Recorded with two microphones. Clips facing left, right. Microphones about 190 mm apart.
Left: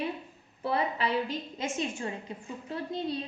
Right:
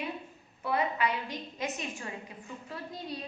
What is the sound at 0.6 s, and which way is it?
A woman's voice, 30° left (ahead or behind).